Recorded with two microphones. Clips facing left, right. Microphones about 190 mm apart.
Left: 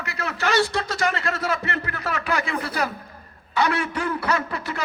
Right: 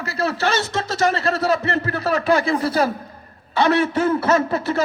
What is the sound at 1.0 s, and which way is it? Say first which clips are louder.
Speech: right 8 dB; 35° right (ahead or behind).